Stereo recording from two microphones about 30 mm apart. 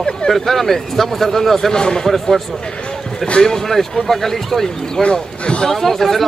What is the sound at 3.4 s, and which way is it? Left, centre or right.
Speech, centre.